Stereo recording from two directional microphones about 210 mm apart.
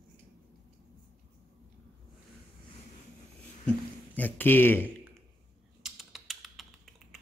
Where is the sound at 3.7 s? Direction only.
10° left (ahead or behind).